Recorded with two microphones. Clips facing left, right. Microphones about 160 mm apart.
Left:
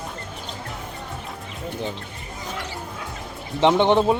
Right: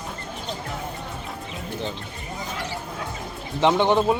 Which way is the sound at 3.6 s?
20° left (ahead or behind).